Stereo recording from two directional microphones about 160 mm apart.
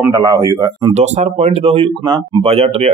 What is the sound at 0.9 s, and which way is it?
Speech, 45° right (ahead or behind).